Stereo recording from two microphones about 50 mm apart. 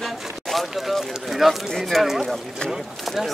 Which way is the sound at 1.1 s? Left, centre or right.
Centre.